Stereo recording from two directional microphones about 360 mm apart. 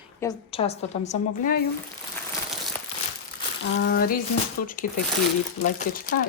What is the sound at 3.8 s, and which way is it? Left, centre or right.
Speech, left.